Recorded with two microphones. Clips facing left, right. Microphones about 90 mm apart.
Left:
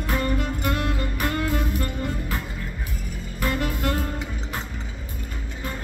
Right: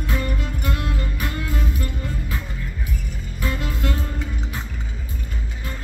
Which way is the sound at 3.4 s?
50° left (ahead or behind).